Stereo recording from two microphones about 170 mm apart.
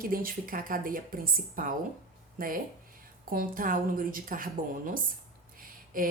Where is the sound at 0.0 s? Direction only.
55° right (ahead or behind).